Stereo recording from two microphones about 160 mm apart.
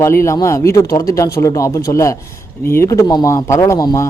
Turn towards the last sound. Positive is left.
turn(degrees=20)  # may be behind; listen again after turning